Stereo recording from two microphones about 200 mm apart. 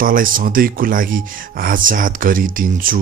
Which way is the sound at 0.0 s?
45° right (ahead or behind).